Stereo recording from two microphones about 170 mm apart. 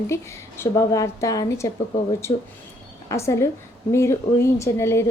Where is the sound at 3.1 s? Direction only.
15° left (ahead or behind).